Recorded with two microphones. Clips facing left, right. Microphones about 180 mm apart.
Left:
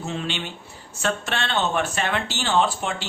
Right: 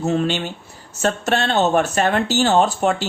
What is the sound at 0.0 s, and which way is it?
A man's voice, 45° right (ahead or behind).